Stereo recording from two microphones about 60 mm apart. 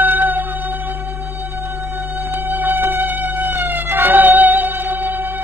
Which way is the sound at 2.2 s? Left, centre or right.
Right.